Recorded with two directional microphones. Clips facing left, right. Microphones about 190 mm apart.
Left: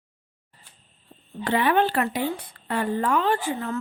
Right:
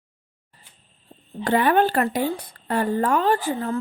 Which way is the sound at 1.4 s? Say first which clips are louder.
Right 3 dB; 45° right (ahead or behind).